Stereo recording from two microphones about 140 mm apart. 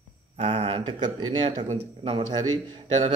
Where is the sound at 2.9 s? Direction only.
55° right (ahead or behind).